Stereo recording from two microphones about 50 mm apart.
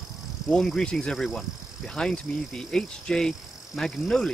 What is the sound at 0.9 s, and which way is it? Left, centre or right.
Speech, centre.